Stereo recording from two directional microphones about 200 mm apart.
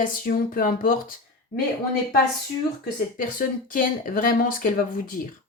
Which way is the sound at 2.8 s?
45° left (ahead or behind).